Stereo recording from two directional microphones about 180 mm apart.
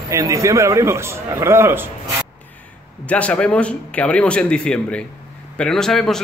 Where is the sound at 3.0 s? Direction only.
5° left (ahead or behind).